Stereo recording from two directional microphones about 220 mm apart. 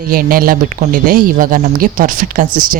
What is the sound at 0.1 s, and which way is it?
Speech, 40° right (ahead or behind).